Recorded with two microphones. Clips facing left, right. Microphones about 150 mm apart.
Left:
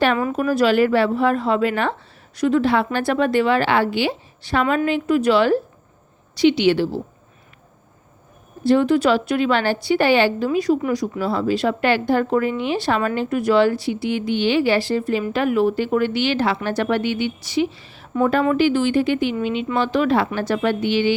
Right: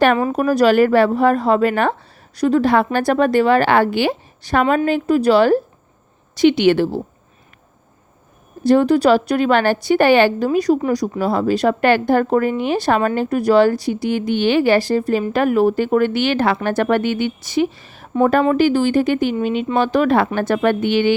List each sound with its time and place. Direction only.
0.2 s a woman's voice: 35° right (ahead or behind)
6.3 s a woman's voice: 50° right (ahead or behind)
8.6 s a woman's voice: 45° right (ahead or behind)